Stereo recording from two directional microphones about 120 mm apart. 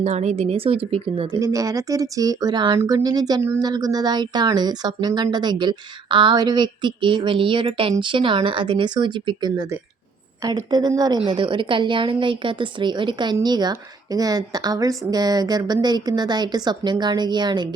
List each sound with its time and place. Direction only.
0.0 s speech: 70° right (ahead or behind); by 1.4 s 50° right (ahead or behind)
1.4 s a woman's voice: 30° right (ahead or behind)